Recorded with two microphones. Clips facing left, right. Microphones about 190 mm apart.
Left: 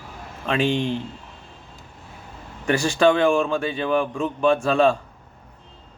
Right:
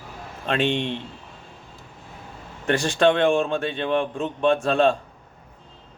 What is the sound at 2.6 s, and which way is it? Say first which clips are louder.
Speech: left 1 dB; centre (ahead or behind).